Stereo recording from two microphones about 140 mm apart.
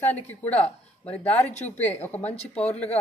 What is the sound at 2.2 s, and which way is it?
Speech, 50° left (ahead or behind).